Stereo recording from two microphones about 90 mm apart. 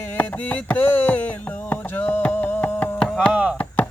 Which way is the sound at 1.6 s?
20° left (ahead or behind).